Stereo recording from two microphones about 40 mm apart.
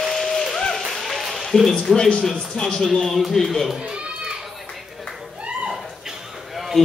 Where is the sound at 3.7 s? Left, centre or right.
Right.